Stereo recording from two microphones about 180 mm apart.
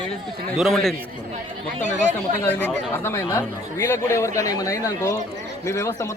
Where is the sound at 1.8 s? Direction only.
45° right (ahead or behind).